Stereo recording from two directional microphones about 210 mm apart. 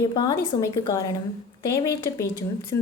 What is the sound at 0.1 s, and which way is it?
A woman's voice, 20° left (ahead or behind).